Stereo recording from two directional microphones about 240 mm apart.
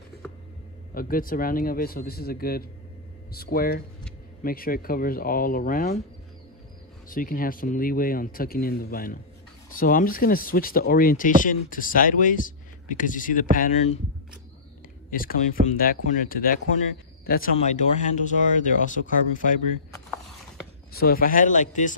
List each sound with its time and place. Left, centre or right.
0.9 s speech: left
7.1 s speech: left
15.0 s speech: left
20.9 s speech: left